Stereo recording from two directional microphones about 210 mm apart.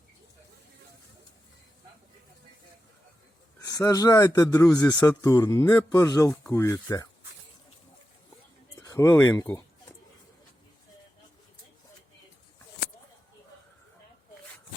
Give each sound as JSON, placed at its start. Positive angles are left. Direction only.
{"t": 3.7, "sound": "speech", "side_deg": 15}
{"t": 8.9, "sound": "speech", "side_deg": 15}